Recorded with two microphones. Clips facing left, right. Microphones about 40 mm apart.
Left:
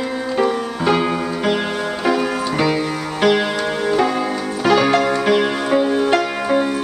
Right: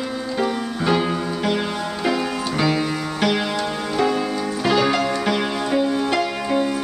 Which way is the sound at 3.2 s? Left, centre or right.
Left.